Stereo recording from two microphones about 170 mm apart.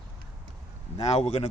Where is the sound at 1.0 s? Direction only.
40° left (ahead or behind).